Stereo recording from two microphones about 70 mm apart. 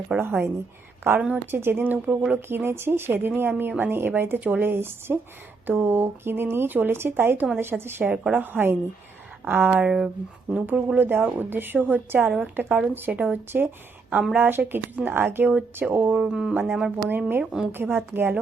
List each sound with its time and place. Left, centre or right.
0.2 s a woman's voice: right
8.1 s speech: centre
8.4 s a woman's voice: right
9.6 s a woman's voice: centre
16.1 s speech: centre
17.1 s speech: right
17.4 s speech: centre
17.7 s speech: right